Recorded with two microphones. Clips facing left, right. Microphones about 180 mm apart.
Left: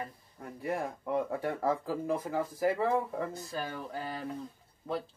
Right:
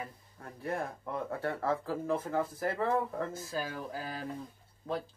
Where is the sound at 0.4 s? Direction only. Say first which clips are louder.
Left 2 dB; 10° left (ahead or behind).